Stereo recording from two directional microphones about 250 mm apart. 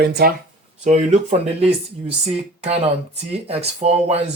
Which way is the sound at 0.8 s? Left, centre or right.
Right.